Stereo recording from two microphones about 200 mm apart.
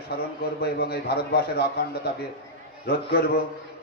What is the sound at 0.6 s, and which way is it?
A man's voice, 50° left (ahead or behind).